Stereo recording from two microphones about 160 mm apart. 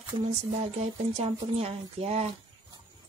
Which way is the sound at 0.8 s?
40° right (ahead or behind).